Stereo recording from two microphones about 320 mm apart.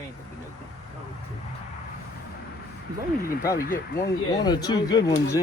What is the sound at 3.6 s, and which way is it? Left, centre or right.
Speech, left.